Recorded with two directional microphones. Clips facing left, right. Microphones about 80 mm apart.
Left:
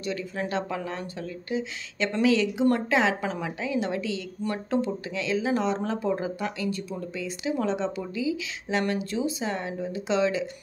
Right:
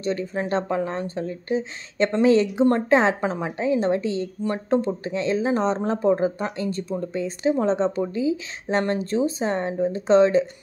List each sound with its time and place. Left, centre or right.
0.0 s speech: right